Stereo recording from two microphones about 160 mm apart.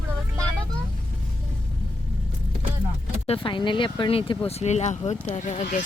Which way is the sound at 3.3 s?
30° left (ahead or behind).